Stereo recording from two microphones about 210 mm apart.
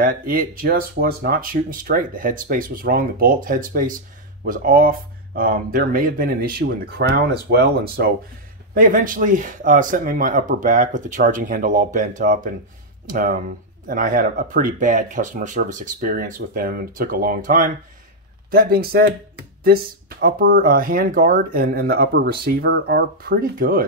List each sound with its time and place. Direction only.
0.0 s speech: 40° right (ahead or behind)